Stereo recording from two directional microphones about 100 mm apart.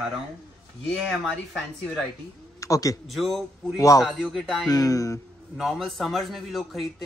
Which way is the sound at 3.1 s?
Centre (ahead or behind).